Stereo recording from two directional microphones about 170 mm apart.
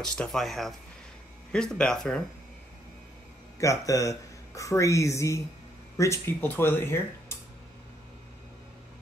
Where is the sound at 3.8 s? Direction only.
20° left (ahead or behind).